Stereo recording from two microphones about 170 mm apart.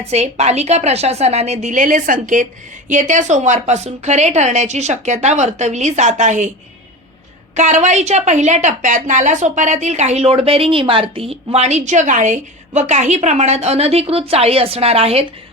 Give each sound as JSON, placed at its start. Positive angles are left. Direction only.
{"t": 0.1, "sound": "a woman's voice", "side_deg": -40}
{"t": 7.5, "sound": "a woman's voice", "side_deg": -45}